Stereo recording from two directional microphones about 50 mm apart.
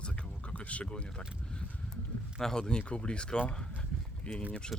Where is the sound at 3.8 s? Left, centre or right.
Left.